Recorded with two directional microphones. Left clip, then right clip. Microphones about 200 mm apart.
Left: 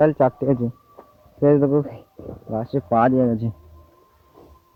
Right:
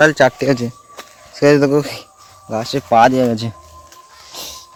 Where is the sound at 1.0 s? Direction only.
35° right (ahead or behind).